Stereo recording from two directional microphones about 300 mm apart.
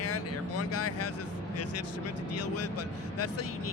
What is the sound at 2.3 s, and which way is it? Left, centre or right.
Speech, left.